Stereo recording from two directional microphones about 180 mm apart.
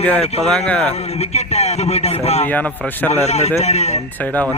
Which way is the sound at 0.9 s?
35° left (ahead or behind).